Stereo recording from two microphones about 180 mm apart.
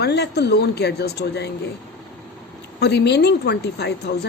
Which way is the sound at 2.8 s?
70° left (ahead or behind).